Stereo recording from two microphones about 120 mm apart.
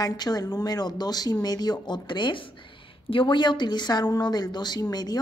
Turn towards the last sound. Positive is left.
turn(degrees=35)  # may be behind; listen again after turning